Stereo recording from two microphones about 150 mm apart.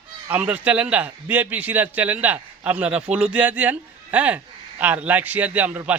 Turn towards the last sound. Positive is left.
turn(degrees=-10)  # may be behind; listen again after turning